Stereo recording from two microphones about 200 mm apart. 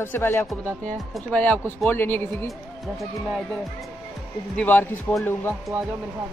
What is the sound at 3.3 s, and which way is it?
Music, centre (ahead or behind).